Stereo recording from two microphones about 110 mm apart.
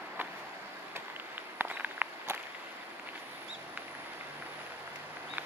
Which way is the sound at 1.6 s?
15° right (ahead or behind).